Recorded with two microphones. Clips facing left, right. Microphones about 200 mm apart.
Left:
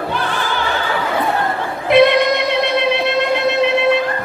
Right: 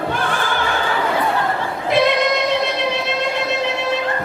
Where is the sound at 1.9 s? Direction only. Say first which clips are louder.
Left 6 dB; 60° left (ahead or behind).